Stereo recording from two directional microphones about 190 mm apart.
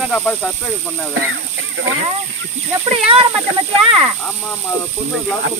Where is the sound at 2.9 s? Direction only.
30° right (ahead or behind).